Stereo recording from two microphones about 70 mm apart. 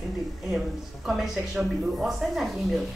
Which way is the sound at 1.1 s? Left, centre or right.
Centre.